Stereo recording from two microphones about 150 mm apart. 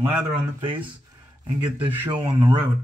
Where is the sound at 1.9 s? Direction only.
10° right (ahead or behind).